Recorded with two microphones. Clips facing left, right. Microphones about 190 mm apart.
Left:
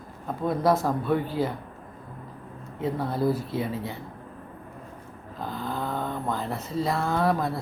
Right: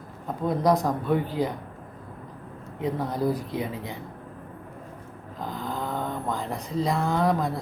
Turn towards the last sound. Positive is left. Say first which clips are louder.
# even
turn(degrees=-20)  # may be behind; listen again after turning